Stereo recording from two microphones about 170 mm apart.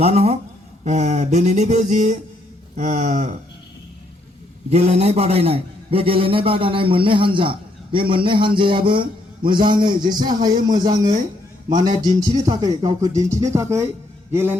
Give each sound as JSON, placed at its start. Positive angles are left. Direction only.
{"t": 0.0, "sound": "a man's voice", "side_deg": -40}
{"t": 0.9, "sound": "a sound", "side_deg": -45}
{"t": 4.7, "sound": "a man's voice", "side_deg": -40}